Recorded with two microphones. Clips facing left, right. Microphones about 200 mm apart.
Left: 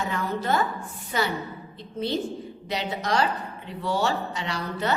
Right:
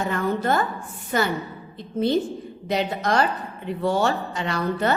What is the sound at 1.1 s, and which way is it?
Speech, 50° right (ahead or behind).